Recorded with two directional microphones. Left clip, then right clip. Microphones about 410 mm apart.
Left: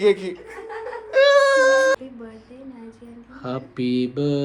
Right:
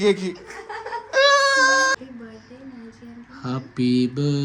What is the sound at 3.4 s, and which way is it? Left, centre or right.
Mantra, centre.